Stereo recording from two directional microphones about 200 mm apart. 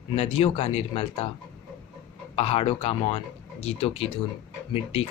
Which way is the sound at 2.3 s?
30° left (ahead or behind).